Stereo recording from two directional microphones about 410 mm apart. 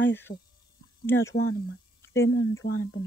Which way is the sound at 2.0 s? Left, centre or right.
Left.